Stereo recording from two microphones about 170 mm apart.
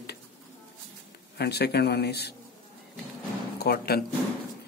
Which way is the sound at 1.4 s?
70° left (ahead or behind).